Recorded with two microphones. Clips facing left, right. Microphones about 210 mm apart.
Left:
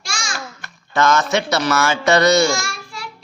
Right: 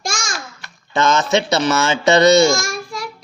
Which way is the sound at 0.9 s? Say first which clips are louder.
Right 1 dB; 20° right (ahead or behind).